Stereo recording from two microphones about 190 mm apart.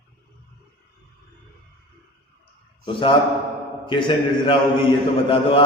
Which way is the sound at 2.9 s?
25° left (ahead or behind).